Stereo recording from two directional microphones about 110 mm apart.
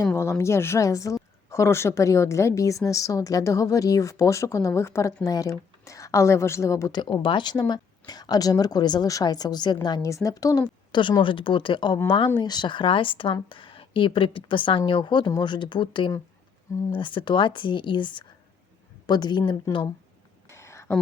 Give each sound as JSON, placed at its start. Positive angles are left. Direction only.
{"t": 0.0, "sound": "a woman's voice", "side_deg": 25}
{"t": 6.9, "sound": "a woman's voice", "side_deg": 45}
{"t": 20.5, "sound": "a sound", "side_deg": 25}